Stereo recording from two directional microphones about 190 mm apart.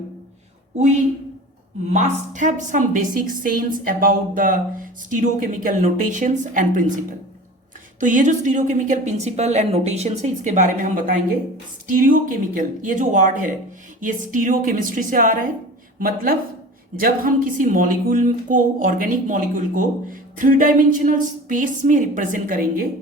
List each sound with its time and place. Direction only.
1.9 s a woman's voice: 40° right (ahead or behind)